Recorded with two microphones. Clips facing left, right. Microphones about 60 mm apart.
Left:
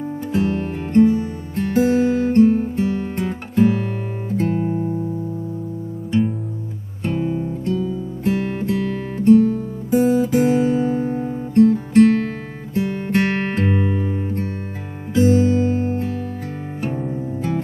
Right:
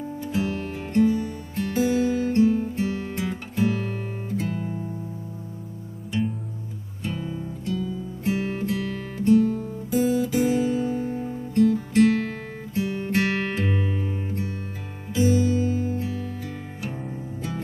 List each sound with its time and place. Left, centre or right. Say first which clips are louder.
0.2 s music: left 6 dB; left
7.0 s music: left 9 dB; left